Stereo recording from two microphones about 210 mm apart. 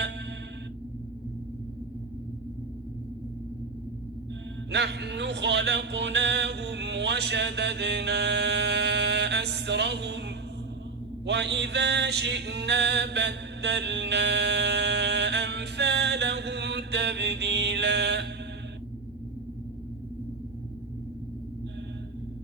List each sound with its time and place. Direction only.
4.7 s music: 55° right (ahead or behind)